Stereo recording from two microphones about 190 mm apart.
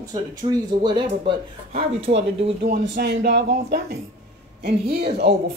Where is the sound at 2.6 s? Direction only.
65° right (ahead or behind).